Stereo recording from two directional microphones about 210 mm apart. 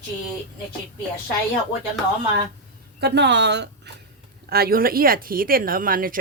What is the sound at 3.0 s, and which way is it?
A woman's voice, 55° right (ahead or behind).